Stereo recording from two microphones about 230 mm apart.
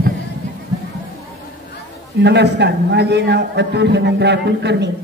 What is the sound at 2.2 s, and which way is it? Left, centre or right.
A man's voice, right.